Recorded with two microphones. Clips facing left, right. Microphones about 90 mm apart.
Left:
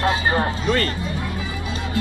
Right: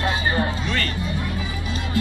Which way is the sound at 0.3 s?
40° left (ahead or behind).